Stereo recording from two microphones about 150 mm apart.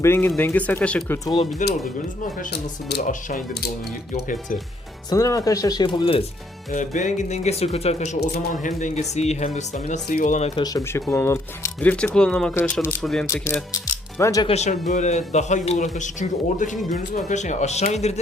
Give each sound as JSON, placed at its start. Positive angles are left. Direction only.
{"t": 0.0, "sound": "speech", "side_deg": 15}
{"t": 1.6, "sound": "speech", "side_deg": 55}
{"t": 2.9, "sound": "speech", "side_deg": 75}
{"t": 5.1, "sound": "speech", "side_deg": 20}
{"t": 6.7, "sound": "a man's voice", "side_deg": 55}
{"t": 10.1, "sound": "speech", "side_deg": 75}
{"t": 10.3, "sound": "a man's voice", "side_deg": 45}
{"t": 11.1, "sound": "speech", "side_deg": 20}
{"t": 13.2, "sound": "speech", "side_deg": 20}
{"t": 14.4, "sound": "a man's voice", "side_deg": 50}
{"t": 17.2, "sound": "a man's voice", "side_deg": 50}